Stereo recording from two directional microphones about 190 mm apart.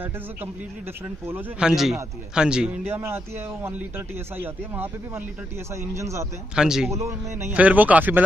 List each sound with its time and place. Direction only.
1.2 s a man's voice: 5° right (ahead or behind)
4.4 s a man's voice: 10° right (ahead or behind)
6.5 s a man's voice: 5° right (ahead or behind)
6.9 s a man's voice: 15° right (ahead or behind)